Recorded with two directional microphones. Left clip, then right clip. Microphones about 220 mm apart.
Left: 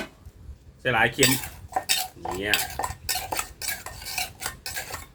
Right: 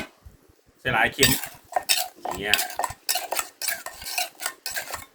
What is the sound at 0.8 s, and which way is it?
Speech, 50° right (ahead or behind).